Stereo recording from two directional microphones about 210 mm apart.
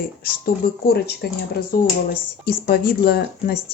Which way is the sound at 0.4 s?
50° left (ahead or behind).